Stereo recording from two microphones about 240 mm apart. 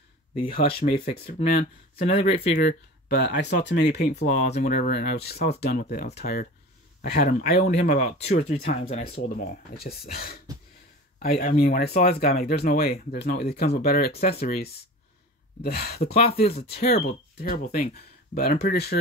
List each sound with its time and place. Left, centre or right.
0.4 s speech: left
2.0 s speech: left
3.3 s speech: left
8.5 s speech: left
8.8 s speech: left
16.2 s speech: left
16.4 s speech: left
17.6 s speech: left
17.9 s speech: left